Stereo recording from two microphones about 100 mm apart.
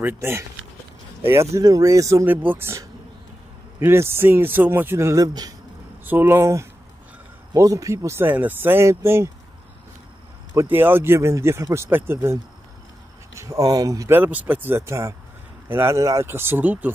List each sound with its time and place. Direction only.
0.0 s speech: 25° right (ahead or behind)
2.2 s speech: 20° right (ahead or behind)
3.8 s speech: 25° right (ahead or behind)
6.0 s speech: 20° right (ahead or behind)
10.5 s speech: 25° right (ahead or behind)
14.1 s speech: 15° right (ahead or behind)